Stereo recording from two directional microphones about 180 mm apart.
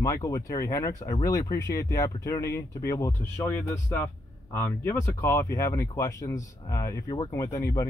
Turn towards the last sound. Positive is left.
turn(degrees=15)  # may be behind; listen again after turning